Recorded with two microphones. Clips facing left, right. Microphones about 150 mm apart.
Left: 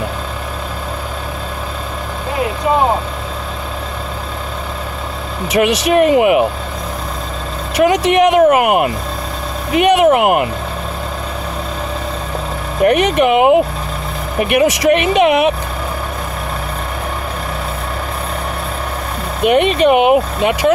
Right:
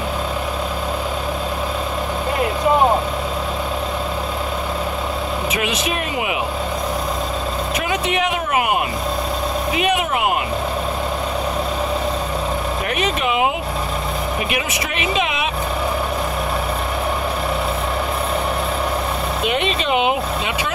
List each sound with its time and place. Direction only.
5.5 s speech: 75° left (ahead or behind); by 6.4 s 55° left (ahead or behind)
7.7 s vehicle: 75° left (ahead or behind)
9.8 s speech: 75° left (ahead or behind)
12.8 s speech: 60° left (ahead or behind)
14.5 s speech: 70° left (ahead or behind)
19.4 s speech: 55° left (ahead or behind)